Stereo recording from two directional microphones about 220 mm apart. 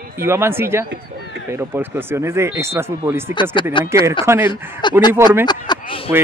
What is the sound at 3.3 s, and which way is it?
Speech, 20° left (ahead or behind).